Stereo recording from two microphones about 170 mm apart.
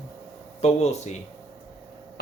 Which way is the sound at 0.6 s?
40° left (ahead or behind).